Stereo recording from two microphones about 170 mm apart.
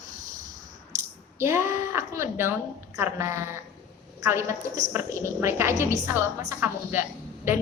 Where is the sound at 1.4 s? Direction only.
15° right (ahead or behind).